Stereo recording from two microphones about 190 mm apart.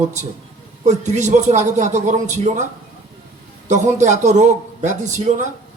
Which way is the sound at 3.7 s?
40° right (ahead or behind).